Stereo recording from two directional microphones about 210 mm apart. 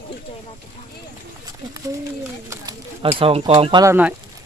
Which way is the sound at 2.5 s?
15° right (ahead or behind).